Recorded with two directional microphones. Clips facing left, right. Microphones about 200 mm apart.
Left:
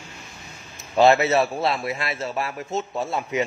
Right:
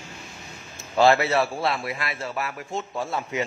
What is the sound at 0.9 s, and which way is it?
A man's voice, 20° left (ahead or behind).